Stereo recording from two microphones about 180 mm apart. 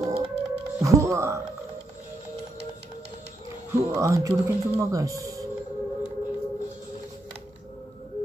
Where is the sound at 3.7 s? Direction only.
15° right (ahead or behind).